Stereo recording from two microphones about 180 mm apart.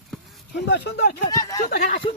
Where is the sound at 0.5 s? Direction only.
70° left (ahead or behind).